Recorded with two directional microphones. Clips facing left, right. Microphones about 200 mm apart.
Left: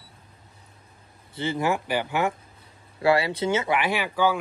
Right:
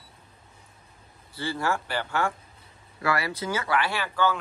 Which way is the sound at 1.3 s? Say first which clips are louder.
Left 3 dB; 20° left (ahead or behind).